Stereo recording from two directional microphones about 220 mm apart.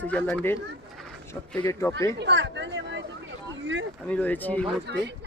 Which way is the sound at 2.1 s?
50° right (ahead or behind).